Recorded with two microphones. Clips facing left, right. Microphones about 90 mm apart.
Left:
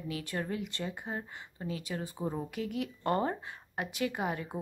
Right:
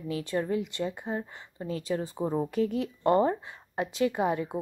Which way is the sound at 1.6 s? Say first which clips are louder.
Right 6 dB; 35° right (ahead or behind).